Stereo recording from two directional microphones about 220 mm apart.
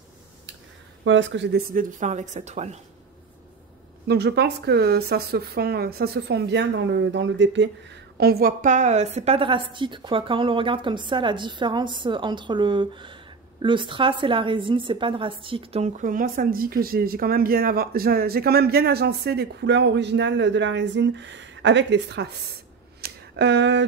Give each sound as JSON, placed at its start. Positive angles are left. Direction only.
{"t": 1.0, "sound": "a woman's voice", "side_deg": -55}
{"t": 4.1, "sound": "speech", "side_deg": -50}
{"t": 8.2, "sound": "a woman's voice", "side_deg": -45}
{"t": 22.9, "sound": "a sound", "side_deg": -45}